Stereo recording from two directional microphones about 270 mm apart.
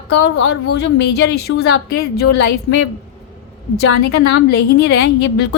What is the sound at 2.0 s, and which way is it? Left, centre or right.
Speech, left.